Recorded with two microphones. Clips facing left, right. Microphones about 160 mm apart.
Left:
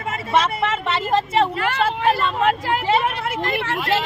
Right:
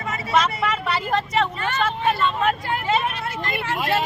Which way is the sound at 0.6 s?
25° left (ahead or behind).